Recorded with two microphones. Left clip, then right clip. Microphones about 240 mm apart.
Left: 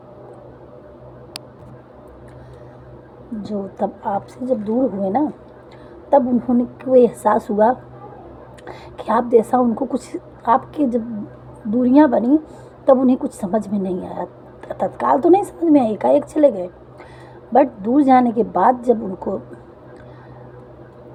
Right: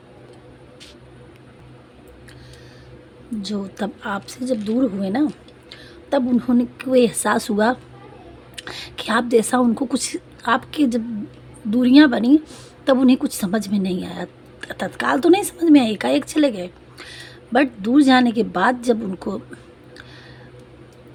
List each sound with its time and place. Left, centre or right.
3.5 s a woman's voice: right
8.5 s a sound: right
9.7 s a woman's voice: right